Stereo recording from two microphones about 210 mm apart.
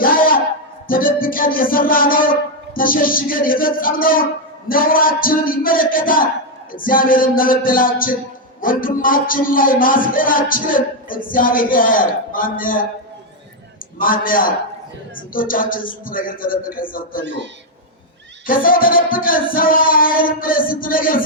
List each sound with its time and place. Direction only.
0.0 s a sound: 40° left (ahead or behind)
0.9 s music: 40° left (ahead or behind)
4.7 s a sound: 40° left (ahead or behind)
6.7 s music: 40° left (ahead or behind)
14.0 s music: 40° left (ahead or behind)
18.4 s music: 40° left (ahead or behind)